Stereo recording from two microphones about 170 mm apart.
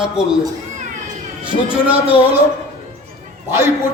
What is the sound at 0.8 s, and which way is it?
Cat, 45° right (ahead or behind).